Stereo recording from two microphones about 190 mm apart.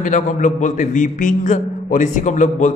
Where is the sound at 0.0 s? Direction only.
40° left (ahead or behind).